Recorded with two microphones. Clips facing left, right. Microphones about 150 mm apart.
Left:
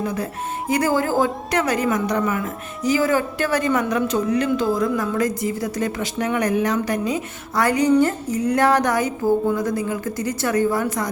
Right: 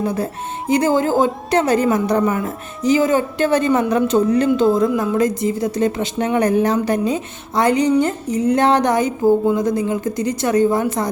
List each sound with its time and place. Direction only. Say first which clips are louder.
0.0 s a woman's voice: right 4 dB; 30° right (ahead or behind)